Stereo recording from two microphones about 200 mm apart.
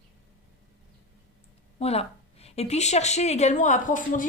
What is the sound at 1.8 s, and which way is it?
A woman's voice, 30° left (ahead or behind).